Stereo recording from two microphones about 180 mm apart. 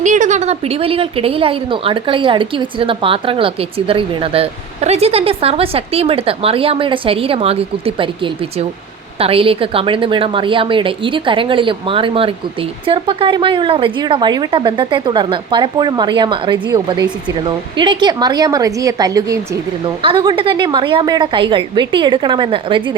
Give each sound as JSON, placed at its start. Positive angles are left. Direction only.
{"t": 0.0, "sound": "a woman's voice", "side_deg": -45}
{"t": 20.0, "sound": "a woman's voice", "side_deg": -30}